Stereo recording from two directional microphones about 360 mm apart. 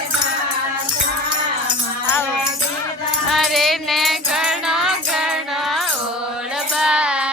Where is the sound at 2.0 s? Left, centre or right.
Centre.